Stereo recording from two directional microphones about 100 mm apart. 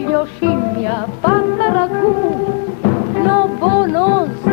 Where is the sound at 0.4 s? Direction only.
25° right (ahead or behind).